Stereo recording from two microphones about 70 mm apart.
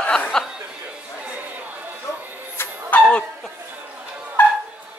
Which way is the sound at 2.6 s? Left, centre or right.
Left.